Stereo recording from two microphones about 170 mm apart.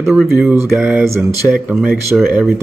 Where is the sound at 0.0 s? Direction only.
Centre (ahead or behind).